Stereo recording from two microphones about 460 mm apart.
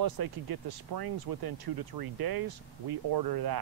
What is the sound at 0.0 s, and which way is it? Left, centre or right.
Speech, right.